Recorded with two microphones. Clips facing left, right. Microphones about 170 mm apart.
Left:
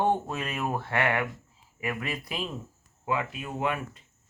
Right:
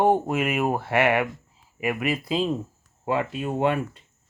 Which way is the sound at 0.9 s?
20° right (ahead or behind).